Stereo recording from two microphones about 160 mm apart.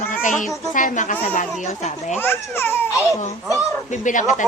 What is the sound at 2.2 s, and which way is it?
Speech, 15° left (ahead or behind).